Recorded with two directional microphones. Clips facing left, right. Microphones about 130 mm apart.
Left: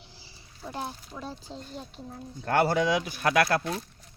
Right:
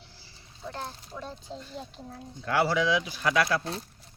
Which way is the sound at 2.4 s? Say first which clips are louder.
Left 2 dB; 50° left (ahead or behind).